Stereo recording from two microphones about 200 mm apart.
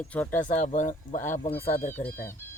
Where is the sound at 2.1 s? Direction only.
10° left (ahead or behind).